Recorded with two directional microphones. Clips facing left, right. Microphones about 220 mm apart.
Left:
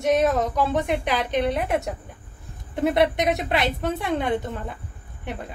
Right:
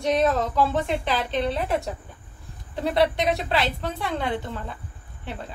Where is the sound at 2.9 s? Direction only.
20° left (ahead or behind).